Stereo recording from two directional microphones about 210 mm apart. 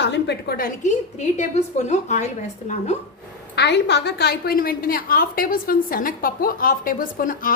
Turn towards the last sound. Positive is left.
turn(degrees=40)  # may be behind; listen again after turning